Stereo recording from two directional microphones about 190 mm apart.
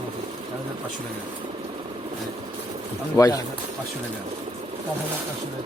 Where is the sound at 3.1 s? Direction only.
15° left (ahead or behind).